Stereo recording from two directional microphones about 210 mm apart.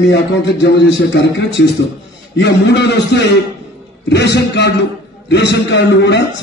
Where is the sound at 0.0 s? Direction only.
60° left (ahead or behind).